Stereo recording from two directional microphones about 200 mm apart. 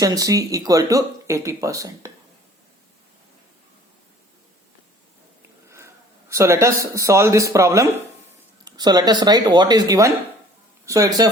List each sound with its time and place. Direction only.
0.0 s speech: 15° right (ahead or behind)
5.6 s speech: 15° right (ahead or behind)